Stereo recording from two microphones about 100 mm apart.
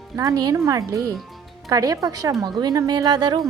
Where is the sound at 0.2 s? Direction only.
40° right (ahead or behind).